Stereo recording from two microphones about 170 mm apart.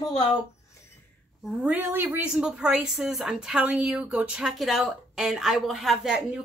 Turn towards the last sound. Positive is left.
turn(degrees=-5)  # may be behind; listen again after turning